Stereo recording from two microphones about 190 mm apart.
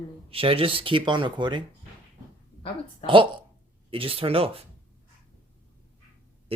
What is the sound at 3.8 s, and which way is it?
Speech, 30° right (ahead or behind).